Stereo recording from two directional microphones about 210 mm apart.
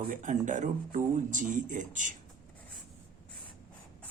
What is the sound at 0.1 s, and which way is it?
Speech, 40° right (ahead or behind).